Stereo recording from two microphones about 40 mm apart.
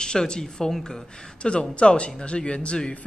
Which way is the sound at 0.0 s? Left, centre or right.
Centre.